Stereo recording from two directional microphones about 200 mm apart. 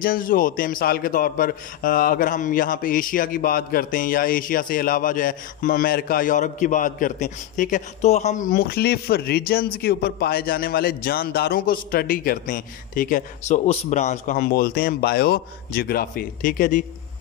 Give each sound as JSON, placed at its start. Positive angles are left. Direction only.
{"t": 0.0, "sound": "a man's voice", "side_deg": 45}